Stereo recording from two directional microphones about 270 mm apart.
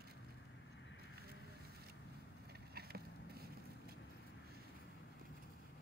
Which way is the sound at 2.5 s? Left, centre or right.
Right.